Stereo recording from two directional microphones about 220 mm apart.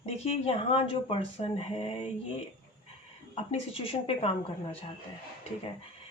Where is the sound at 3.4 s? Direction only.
25° left (ahead or behind).